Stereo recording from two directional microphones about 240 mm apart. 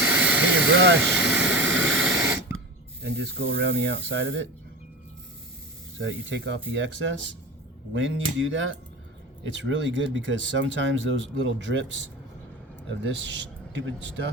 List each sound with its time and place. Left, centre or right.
0.0 s vehicle: centre
0.5 s speech: right
1.1 s vehicle: centre
1.4 s vehicle: right
3.0 s speech: right
6.0 s speech: right
12.9 s a man's voice: right